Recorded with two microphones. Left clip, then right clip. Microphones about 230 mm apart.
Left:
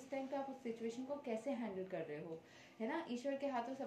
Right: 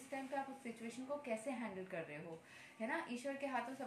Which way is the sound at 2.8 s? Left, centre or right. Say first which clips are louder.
Even; centre.